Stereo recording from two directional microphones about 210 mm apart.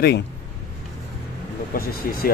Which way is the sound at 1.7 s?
45° left (ahead or behind).